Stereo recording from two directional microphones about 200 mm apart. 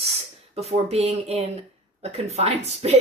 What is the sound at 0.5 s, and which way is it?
Speech, 30° right (ahead or behind).